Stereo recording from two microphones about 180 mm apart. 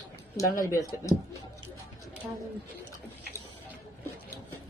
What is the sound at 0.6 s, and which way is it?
Speech, 20° left (ahead or behind).